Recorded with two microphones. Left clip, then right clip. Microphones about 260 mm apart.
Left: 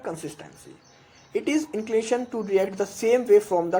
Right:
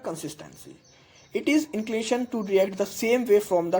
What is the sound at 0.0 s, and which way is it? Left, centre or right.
Speech, right.